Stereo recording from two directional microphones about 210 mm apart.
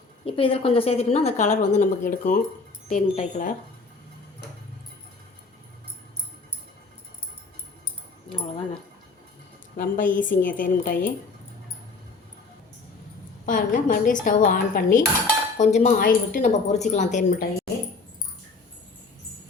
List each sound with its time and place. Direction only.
0.3 s a woman's voice: 25° left (ahead or behind)
8.3 s speech: 25° left (ahead or behind)
9.7 s a woman's voice: 40° left (ahead or behind)
13.4 s a woman's voice: 40° left (ahead or behind)